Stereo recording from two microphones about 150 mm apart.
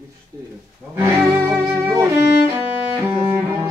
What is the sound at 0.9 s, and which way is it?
Speech, 15° right (ahead or behind).